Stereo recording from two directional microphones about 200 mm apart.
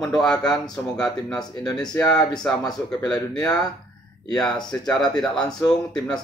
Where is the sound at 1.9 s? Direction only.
20° left (ahead or behind).